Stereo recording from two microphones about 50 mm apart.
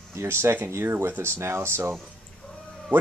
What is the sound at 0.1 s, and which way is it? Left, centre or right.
Speech, right.